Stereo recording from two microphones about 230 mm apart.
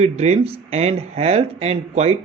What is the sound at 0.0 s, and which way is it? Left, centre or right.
Speech, right.